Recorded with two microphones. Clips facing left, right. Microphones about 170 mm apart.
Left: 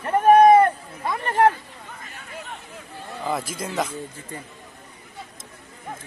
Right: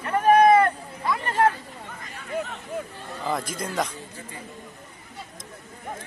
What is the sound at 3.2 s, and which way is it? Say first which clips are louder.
Speech: left 1 dB; 5° left (ahead or behind).